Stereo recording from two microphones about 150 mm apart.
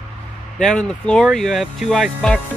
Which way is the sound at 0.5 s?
5° left (ahead or behind).